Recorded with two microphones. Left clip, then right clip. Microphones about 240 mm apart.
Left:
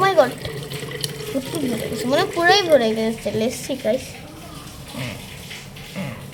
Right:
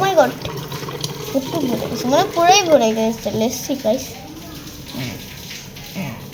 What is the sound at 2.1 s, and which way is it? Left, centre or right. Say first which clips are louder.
A woman's voice: right 3 dB; centre.